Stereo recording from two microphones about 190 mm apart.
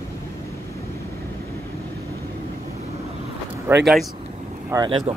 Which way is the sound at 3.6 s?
5° right (ahead or behind).